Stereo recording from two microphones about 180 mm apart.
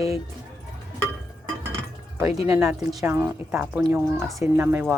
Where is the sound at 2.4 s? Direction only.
15° right (ahead or behind).